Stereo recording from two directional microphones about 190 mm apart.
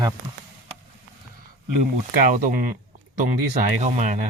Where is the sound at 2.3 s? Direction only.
45° right (ahead or behind).